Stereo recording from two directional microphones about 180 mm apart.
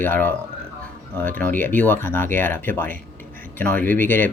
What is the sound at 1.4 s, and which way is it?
Speech, 10° left (ahead or behind).